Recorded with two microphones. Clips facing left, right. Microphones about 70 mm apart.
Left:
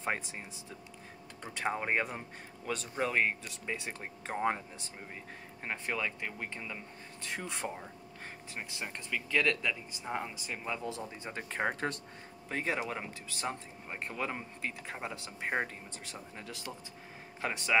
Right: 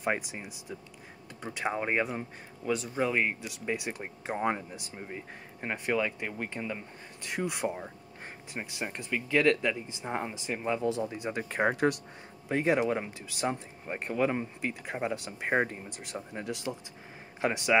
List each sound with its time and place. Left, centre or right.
0.0 s speech: centre